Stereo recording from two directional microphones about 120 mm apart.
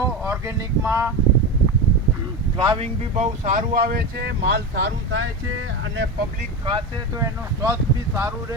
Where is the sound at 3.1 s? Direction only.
75° right (ahead or behind).